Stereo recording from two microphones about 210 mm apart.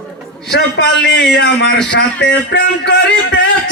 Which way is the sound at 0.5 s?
55° left (ahead or behind).